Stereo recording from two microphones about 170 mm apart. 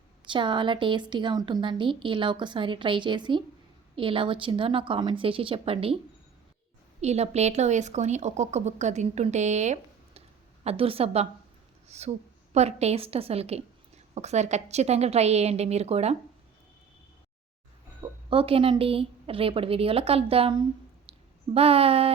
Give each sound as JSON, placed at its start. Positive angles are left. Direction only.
{"t": 0.3, "sound": "a woman's voice", "side_deg": -30}
{"t": 7.0, "sound": "speech", "side_deg": -40}
{"t": 18.0, "sound": "speech", "side_deg": -30}